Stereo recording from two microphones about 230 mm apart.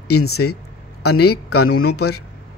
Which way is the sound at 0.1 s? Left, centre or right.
Left.